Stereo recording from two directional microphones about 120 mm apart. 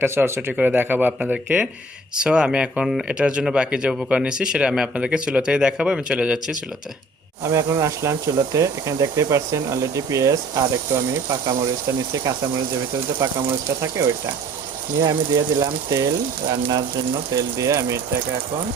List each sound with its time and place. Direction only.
0.0 s speech: 20° right (ahead or behind)
7.4 s speech: 25° right (ahead or behind)